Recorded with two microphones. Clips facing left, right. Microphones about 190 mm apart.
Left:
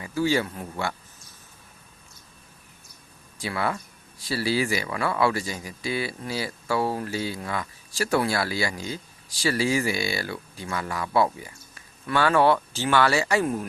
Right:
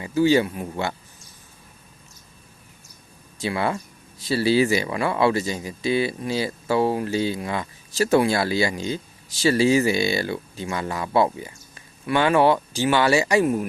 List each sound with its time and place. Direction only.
0.0 s speech: 20° right (ahead or behind)
3.3 s speech: 25° right (ahead or behind)